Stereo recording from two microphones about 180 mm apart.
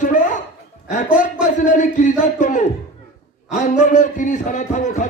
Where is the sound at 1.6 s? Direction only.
45° left (ahead or behind).